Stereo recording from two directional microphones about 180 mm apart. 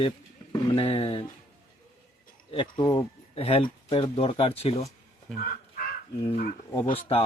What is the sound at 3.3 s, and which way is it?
Speech, 35° left (ahead or behind).